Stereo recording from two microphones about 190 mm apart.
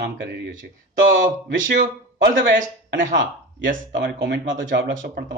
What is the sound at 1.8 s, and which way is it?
A man's voice, 50° right (ahead or behind).